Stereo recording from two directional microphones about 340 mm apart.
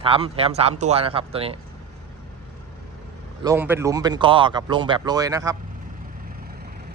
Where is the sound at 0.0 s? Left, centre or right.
Centre.